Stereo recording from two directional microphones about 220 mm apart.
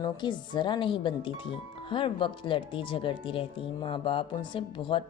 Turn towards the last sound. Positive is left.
turn(degrees=25)  # may be behind; listen again after turning